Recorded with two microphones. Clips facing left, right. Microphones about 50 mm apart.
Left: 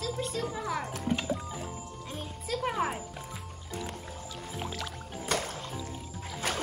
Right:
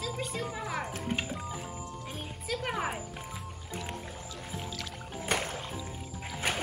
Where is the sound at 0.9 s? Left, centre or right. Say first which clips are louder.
Left 3 dB; right.